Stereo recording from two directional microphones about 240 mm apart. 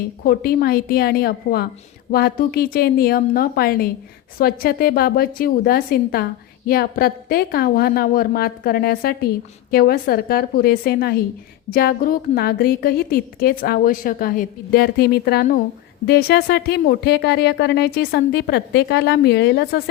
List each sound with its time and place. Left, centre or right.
0.3 s a woman's voice: left